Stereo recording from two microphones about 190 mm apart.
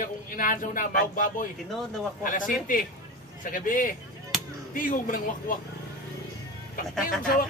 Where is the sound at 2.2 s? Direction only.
45° left (ahead or behind).